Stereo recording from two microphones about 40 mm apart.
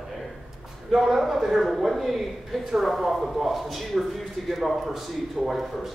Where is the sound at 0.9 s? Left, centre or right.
Centre.